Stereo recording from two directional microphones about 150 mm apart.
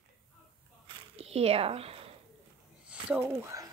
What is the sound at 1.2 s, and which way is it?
Speech, 40° right (ahead or behind).